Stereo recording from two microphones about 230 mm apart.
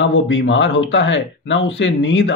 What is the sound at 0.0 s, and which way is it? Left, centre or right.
Speech, left.